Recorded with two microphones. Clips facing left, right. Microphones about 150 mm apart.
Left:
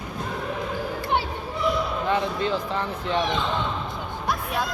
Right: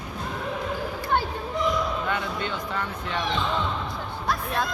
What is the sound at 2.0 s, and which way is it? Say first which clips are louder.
Speech: left 5 dB; 30° left (ahead or behind).